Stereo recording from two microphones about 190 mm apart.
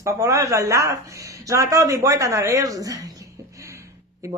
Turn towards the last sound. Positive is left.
turn(degrees=-15)  # may be behind; listen again after turning